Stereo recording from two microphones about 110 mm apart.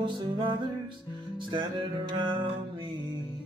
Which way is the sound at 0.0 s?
45° right (ahead or behind).